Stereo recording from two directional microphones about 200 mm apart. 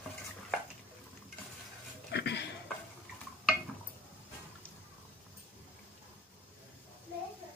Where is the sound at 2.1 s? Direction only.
60° left (ahead or behind).